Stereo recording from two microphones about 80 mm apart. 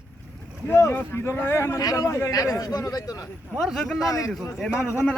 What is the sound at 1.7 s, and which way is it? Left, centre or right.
Speech, left.